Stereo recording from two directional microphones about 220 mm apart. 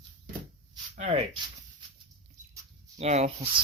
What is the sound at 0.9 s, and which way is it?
Speech, 30° right (ahead or behind).